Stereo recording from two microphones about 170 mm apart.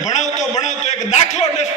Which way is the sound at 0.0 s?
45° left (ahead or behind).